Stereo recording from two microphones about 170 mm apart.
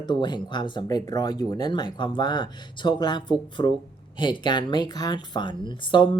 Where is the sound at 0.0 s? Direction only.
25° left (ahead or behind).